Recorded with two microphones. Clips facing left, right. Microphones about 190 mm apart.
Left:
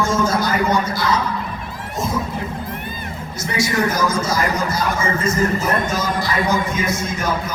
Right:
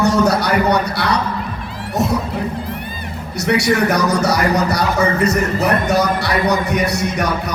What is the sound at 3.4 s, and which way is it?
Speech, 70° right (ahead or behind).